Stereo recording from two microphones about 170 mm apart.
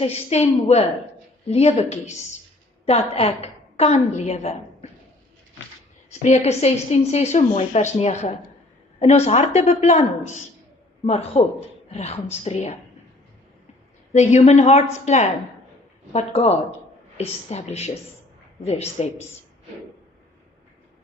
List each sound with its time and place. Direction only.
0.0 s a woman's voice: 35° left (ahead or behind)
6.1 s a woman's voice: 40° left (ahead or behind)
14.1 s a woman's voice: 40° left (ahead or behind)